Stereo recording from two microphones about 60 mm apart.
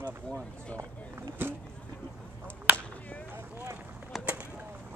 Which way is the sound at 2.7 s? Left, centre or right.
Left.